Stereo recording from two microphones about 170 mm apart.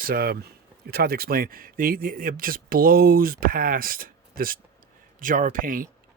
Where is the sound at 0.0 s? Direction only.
65° right (ahead or behind).